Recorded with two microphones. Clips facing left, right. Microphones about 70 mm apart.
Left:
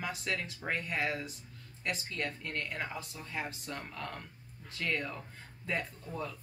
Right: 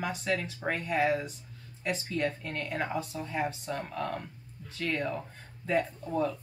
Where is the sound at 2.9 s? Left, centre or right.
Right.